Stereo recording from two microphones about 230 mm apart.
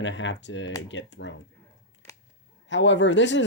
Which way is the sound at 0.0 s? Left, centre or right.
Left.